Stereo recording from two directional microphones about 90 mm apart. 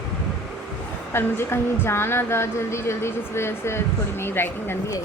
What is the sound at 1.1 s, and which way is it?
A woman's voice, 25° left (ahead or behind).